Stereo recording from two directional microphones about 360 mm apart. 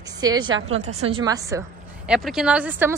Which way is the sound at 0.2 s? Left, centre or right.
Centre.